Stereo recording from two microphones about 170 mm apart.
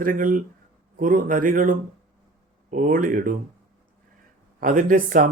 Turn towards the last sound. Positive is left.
turn(degrees=-50)  # may be behind; listen again after turning